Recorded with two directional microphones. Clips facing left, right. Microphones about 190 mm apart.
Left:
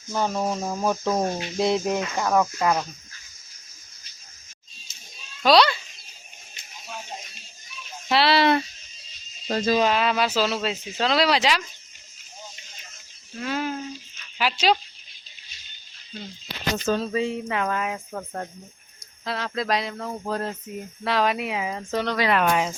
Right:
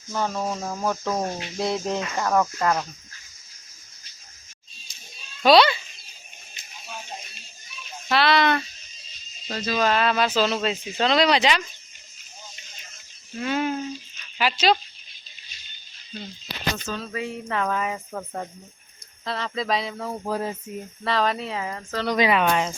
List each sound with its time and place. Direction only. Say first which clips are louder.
0.1 s cricket: left 2 dB; 15° left (ahead or behind)
4.9 s children playing: right 1 dB; 25° left (ahead or behind)
5.4 s a child's voice: right 2 dB; centre (ahead or behind)
8.1 s speech: left 1 dB; 30° left (ahead or behind)
9.5 s speech: left 6 dB; 40° left (ahead or behind)
9.7 s speech: right 2 dB; 10° left (ahead or behind)
13.4 s speech: right 3 dB; centre (ahead or behind)
14.3 s cricket: right 1 dB; 5° left (ahead or behind)
16.8 s a sound: left 8 dB; 40° left (ahead or behind)
17.1 s speech: left 6 dB; 25° left (ahead or behind)
17.5 s speech: even; 5° left (ahead or behind)
21.0 s cricket: left 1 dB; 5° left (ahead or behind)
22.0 s speech: right 5 dB; 15° right (ahead or behind)
22.3 s speech: even; centre (ahead or behind)